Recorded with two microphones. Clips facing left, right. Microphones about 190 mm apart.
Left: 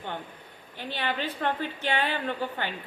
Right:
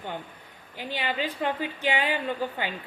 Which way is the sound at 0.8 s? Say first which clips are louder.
Right 1 dB; 10° right (ahead or behind).